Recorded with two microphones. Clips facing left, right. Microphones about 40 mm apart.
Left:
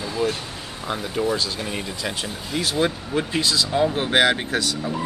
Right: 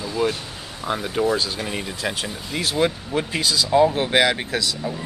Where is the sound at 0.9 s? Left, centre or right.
Centre.